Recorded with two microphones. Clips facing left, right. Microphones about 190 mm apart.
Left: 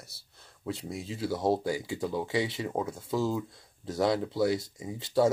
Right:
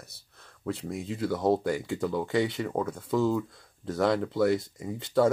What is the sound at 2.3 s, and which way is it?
Speech, 5° left (ahead or behind).